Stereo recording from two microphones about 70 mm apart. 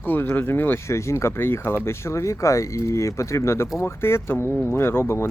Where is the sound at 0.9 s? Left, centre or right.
Left.